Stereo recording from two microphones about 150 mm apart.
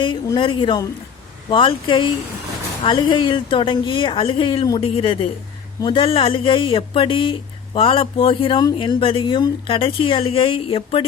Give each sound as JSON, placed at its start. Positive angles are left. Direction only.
{"t": 0.3, "sound": "speech", "side_deg": 30}